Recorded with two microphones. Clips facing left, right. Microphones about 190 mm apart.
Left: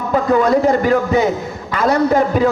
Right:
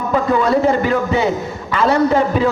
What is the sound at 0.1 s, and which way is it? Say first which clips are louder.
A man's voice: left 2 dB; 45° left (ahead or behind).